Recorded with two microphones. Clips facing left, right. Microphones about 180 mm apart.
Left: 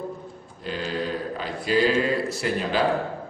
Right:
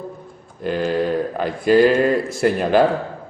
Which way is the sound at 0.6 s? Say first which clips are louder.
Right 9 dB; 55° right (ahead or behind).